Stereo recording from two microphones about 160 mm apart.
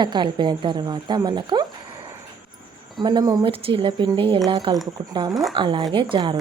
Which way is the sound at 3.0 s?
25° right (ahead or behind).